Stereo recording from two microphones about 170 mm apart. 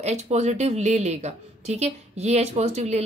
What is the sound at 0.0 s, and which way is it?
A woman's voice, 40° right (ahead or behind).